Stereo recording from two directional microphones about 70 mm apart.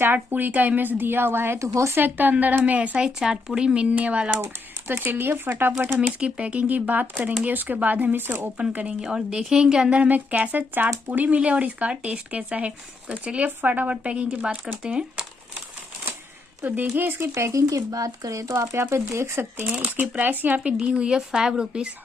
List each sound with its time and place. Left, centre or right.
0.0 s a woman's voice: right
3.1 s speech: centre
4.4 s speech: right
5.9 s a woman's voice: centre
8.5 s speech: centre
9.9 s a woman's voice: right
16.9 s a woman's voice: right
17.3 s speech: right
19.6 s a woman's voice: right